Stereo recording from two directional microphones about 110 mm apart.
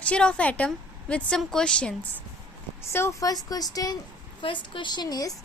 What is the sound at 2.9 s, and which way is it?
A woman's voice, 25° left (ahead or behind).